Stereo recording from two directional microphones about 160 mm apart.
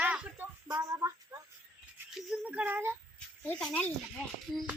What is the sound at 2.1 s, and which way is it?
Child singing, 5° right (ahead or behind).